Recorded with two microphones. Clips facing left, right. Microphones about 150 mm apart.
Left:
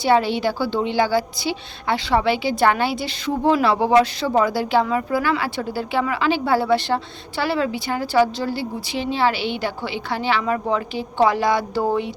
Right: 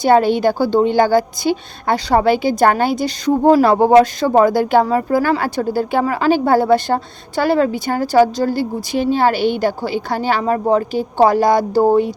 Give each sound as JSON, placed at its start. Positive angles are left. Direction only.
{"t": 0.0, "sound": "a woman's voice", "side_deg": -50}